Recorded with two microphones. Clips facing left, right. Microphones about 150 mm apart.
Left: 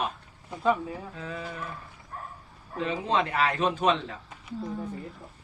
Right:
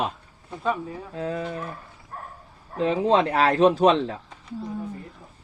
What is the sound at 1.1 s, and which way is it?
Speech, 50° right (ahead or behind).